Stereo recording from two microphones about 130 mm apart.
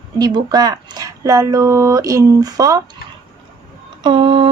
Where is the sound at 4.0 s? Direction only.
40° right (ahead or behind).